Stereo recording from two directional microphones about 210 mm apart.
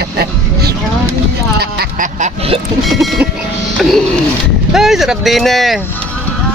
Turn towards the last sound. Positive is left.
turn(degrees=0)  # may be behind; listen again after turning